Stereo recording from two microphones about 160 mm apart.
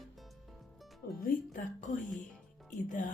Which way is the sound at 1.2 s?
55° left (ahead or behind).